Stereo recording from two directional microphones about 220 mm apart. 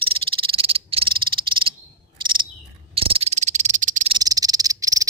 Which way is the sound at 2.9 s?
25° right (ahead or behind).